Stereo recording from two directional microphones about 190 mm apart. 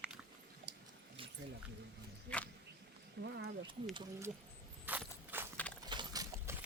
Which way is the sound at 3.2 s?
65° right (ahead or behind).